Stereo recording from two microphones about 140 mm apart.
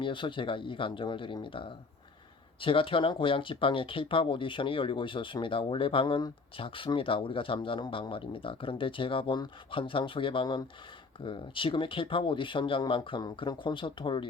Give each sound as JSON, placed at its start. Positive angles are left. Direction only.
{"t": 0.0, "sound": "speech", "side_deg": 35}